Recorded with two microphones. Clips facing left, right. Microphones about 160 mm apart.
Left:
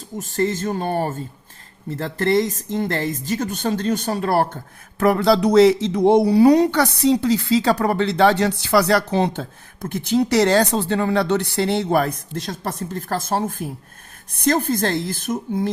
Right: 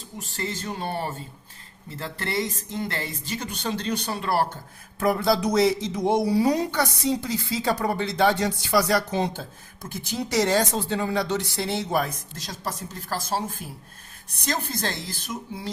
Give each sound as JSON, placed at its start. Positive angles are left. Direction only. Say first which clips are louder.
{"t": 0.2, "sound": "speech", "louder": "left 11 dB", "side_deg": 45}
{"t": 4.9, "sound": "speech", "louder": "left 6 dB", "side_deg": 65}